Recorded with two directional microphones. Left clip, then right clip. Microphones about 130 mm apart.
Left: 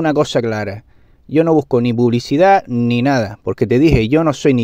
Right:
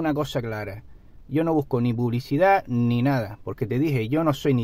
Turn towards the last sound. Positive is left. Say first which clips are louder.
# left 9 dB
turn(degrees=60)  # may be behind; listen again after turning